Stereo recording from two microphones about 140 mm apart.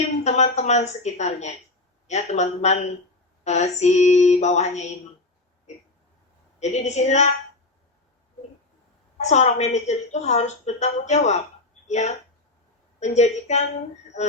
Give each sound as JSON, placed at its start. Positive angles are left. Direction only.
{"t": 0.3, "sound": "a woman's voice", "side_deg": 55}
{"t": 6.6, "sound": "a woman's voice", "side_deg": 55}
{"t": 9.1, "sound": "a woman's voice", "side_deg": 55}